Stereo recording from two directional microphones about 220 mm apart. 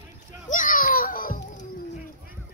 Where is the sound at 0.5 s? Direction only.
35° left (ahead or behind).